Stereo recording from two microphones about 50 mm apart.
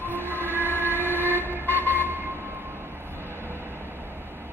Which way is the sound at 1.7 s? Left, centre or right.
Right.